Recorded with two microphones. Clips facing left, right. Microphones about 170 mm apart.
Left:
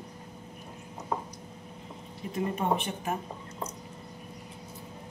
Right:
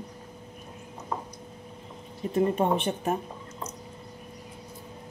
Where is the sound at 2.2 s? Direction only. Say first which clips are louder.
Right 5 dB; 35° right (ahead or behind).